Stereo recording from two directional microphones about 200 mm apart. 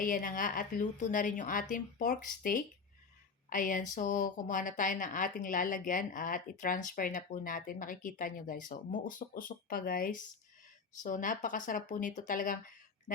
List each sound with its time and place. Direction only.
0.0 s a woman's voice: 45° left (ahead or behind)